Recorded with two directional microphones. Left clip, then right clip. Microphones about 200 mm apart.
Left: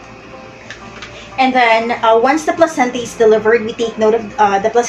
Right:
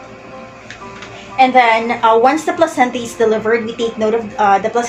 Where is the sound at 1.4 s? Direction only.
15° right (ahead or behind).